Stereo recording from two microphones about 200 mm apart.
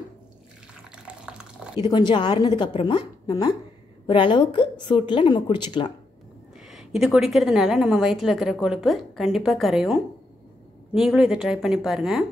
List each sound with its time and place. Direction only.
0.9 s water: 5° right (ahead or behind)
1.8 s a woman's voice: 20° left (ahead or behind)
6.7 s a woman's voice: centre (ahead or behind)